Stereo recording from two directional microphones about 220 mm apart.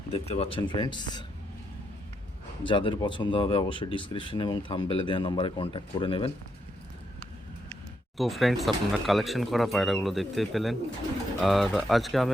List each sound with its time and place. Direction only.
0.1 s speech: 25° left (ahead or behind)
2.6 s speech: 20° left (ahead or behind)
8.2 s speech: centre (ahead or behind)